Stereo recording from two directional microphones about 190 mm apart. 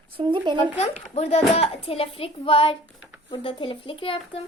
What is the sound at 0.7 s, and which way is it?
A woman's voice, 35° left (ahead or behind).